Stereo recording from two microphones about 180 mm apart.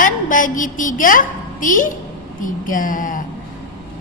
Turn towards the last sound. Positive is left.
turn(degrees=50)  # may be behind; listen again after turning